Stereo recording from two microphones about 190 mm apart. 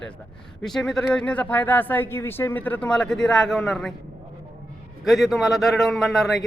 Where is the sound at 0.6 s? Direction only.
Centre (ahead or behind).